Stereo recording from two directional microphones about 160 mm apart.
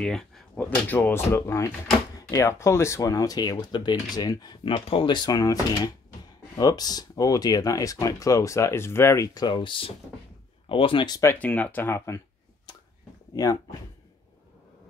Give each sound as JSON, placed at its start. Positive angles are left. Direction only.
{"t": 0.0, "sound": "speech", "side_deg": 5}
{"t": 11.1, "sound": "speech", "side_deg": 15}
{"t": 13.3, "sound": "speech", "side_deg": 20}